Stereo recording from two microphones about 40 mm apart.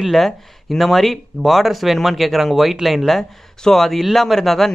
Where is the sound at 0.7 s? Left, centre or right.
Centre.